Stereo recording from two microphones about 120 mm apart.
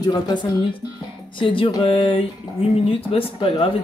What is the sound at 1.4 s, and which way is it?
A woman's voice, 45° left (ahead or behind).